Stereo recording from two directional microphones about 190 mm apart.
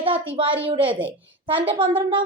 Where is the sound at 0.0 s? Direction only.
30° right (ahead or behind).